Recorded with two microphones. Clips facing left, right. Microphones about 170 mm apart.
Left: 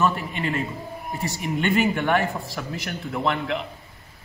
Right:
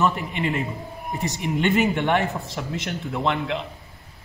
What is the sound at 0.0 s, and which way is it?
Speech, 20° right (ahead or behind).